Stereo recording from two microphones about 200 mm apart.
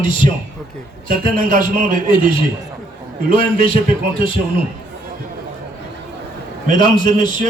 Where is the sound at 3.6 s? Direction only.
25° left (ahead or behind).